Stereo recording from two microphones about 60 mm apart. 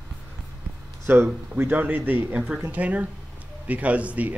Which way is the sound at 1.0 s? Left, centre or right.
Right.